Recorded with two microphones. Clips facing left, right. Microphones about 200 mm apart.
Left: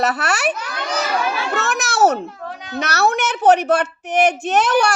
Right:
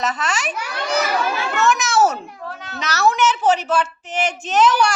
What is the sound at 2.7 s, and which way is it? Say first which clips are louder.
A woman's voice: left 1 dB; 55° left (ahead or behind).